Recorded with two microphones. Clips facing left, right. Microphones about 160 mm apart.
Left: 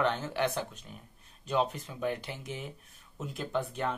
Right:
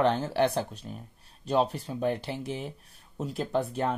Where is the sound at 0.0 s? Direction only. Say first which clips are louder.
Right 5 dB; 35° right (ahead or behind).